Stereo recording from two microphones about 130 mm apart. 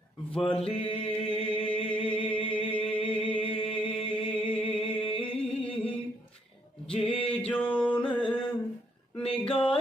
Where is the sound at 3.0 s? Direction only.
45° left (ahead or behind).